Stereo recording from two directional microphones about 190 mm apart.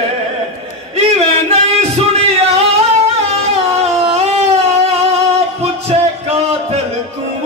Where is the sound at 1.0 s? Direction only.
35° right (ahead or behind).